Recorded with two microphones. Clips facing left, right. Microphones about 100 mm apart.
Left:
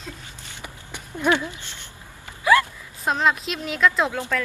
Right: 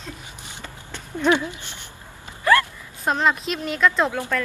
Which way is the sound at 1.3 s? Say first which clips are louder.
Right 1 dB; 20° right (ahead or behind).